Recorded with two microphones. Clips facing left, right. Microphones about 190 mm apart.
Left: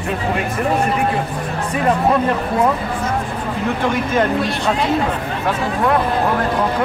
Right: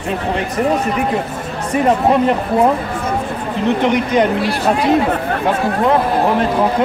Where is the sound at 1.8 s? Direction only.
20° right (ahead or behind).